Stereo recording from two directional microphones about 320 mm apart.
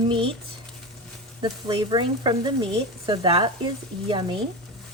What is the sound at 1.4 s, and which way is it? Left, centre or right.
Speech, centre.